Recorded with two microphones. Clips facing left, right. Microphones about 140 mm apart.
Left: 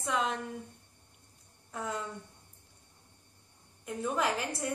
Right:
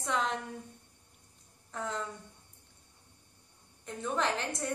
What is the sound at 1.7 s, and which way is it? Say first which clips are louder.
Speech: even; 5° left (ahead or behind).